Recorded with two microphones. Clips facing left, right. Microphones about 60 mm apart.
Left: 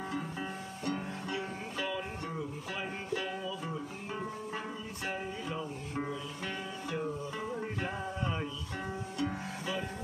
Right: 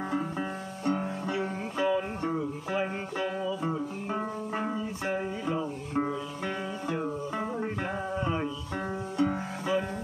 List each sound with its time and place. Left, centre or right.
0.8 s music: right
9.1 s music: right